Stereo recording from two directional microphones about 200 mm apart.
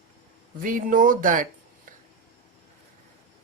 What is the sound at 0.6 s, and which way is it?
Speech, 45° right (ahead or behind).